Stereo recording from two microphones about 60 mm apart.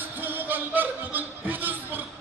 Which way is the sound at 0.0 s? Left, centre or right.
Right.